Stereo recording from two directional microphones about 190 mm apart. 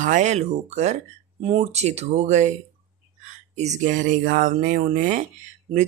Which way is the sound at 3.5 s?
35° right (ahead or behind).